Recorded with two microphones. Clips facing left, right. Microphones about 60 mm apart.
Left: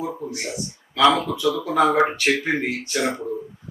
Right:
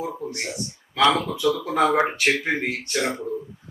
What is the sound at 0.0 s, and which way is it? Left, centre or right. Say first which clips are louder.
Speech: left 1 dB; centre.